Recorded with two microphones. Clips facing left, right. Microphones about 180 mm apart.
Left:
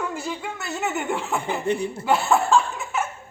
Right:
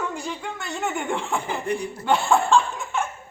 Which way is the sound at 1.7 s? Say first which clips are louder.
Left 3 dB; 25° left (ahead or behind).